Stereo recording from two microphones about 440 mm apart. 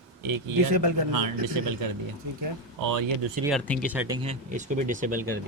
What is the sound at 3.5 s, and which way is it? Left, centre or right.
Speech, centre.